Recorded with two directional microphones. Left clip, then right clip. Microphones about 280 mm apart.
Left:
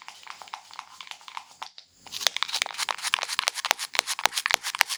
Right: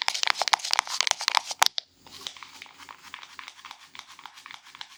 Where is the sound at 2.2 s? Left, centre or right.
Left.